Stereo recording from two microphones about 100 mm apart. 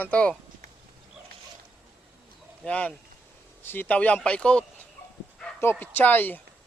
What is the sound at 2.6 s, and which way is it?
A man's voice, 10° left (ahead or behind).